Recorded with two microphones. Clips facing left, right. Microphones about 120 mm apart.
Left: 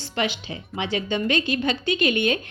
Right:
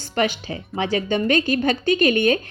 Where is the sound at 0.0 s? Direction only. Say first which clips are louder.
Right 4 dB; 45° right (ahead or behind).